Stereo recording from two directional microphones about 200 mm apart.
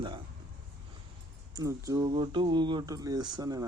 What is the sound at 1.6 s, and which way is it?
Speech, 15° right (ahead or behind).